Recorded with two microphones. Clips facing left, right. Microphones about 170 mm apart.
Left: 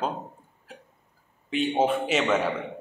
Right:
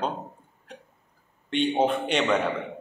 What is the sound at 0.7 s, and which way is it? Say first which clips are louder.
Hiccup: right 2 dB; 5° left (ahead or behind).